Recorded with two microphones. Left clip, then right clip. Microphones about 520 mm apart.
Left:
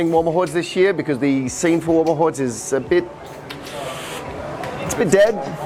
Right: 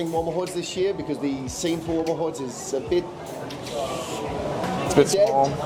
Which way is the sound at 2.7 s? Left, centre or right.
Left.